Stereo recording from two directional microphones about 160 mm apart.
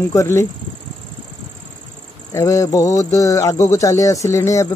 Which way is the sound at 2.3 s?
20° left (ahead or behind).